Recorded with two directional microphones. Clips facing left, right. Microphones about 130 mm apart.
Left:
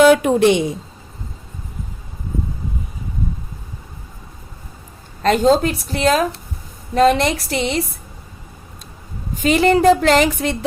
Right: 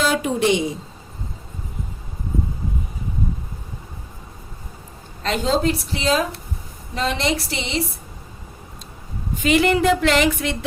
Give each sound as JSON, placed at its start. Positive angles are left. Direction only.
{"t": 0.0, "sound": "speech", "side_deg": 60}
{"t": 5.2, "sound": "a woman's voice", "side_deg": 45}
{"t": 9.4, "sound": "speech", "side_deg": 35}